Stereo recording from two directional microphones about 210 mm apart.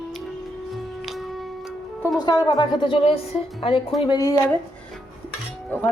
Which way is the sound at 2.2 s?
20° left (ahead or behind).